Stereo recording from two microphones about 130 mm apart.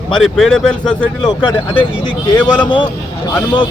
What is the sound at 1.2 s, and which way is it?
Speech, 35° left (ahead or behind).